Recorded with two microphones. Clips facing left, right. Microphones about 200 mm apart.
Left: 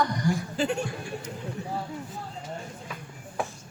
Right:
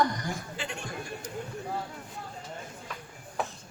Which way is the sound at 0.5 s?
40° left (ahead or behind).